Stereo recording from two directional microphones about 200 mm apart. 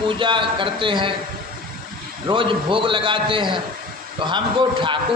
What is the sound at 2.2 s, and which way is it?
A man's voice, 25° right (ahead or behind).